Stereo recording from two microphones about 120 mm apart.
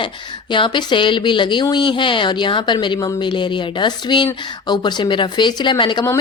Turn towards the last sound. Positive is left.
turn(degrees=40)  # may be behind; listen again after turning